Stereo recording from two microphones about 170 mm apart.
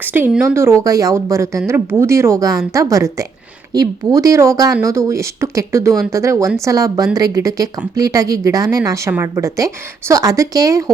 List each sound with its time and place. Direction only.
0.0 s a woman's voice: 10° right (ahead or behind)